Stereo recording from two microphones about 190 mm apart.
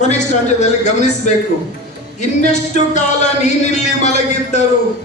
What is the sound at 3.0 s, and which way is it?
Speech, 40° left (ahead or behind).